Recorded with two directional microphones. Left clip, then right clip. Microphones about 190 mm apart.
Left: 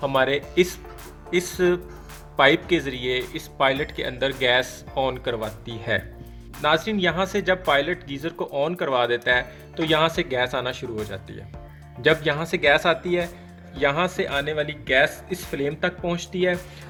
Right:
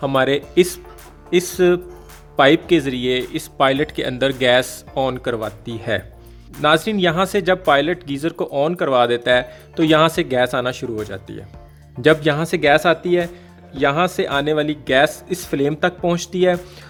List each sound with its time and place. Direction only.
0.0 s speech: 45° right (ahead or behind)